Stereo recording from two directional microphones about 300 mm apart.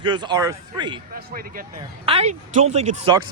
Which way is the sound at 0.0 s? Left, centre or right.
Centre.